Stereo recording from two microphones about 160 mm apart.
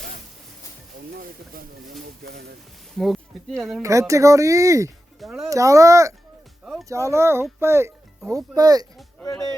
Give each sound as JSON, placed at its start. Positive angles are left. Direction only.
{"t": 1.1, "sound": "speech", "side_deg": -65}
{"t": 3.0, "sound": "speech", "side_deg": 0}
{"t": 3.8, "sound": "speech", "side_deg": -20}
{"t": 5.2, "sound": "speech", "side_deg": -5}
{"t": 5.5, "sound": "speech", "side_deg": -20}